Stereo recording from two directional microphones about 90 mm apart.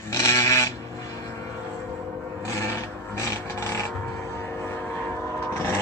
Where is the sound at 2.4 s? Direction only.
35° left (ahead or behind).